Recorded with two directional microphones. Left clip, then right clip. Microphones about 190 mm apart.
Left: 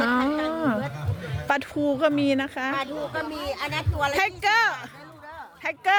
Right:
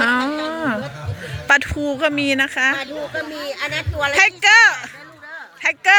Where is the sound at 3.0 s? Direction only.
25° left (ahead or behind).